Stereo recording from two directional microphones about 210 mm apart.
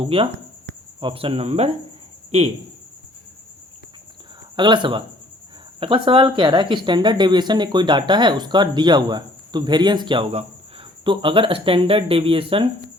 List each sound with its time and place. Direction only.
0.0 s speech: 25° right (ahead or behind)
4.5 s speech: 20° right (ahead or behind)